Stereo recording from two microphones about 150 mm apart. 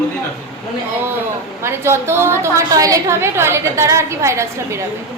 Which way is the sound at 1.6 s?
15° right (ahead or behind).